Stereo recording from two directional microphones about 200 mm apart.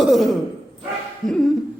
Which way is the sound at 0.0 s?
Centre (ahead or behind).